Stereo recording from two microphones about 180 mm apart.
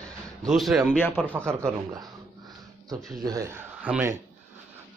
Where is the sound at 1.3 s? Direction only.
15° right (ahead or behind).